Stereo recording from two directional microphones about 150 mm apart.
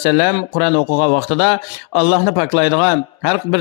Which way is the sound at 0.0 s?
40° left (ahead or behind).